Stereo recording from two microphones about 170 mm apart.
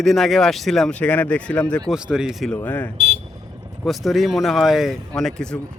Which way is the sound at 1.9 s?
5° right (ahead or behind).